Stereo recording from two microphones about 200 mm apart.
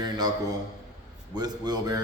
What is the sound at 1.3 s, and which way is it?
Speech, 20° right (ahead or behind).